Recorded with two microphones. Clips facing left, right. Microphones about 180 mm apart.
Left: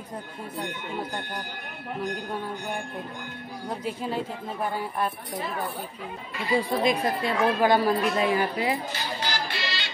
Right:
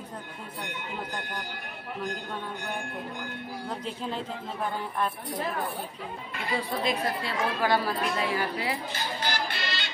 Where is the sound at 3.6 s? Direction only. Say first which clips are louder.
Left 5 dB; 10° left (ahead or behind).